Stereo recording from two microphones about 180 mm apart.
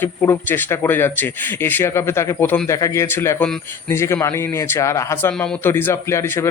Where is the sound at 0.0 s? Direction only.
10° left (ahead or behind).